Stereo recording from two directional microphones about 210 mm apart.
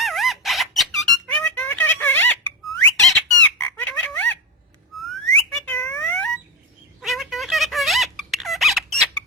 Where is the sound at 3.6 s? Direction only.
10° left (ahead or behind).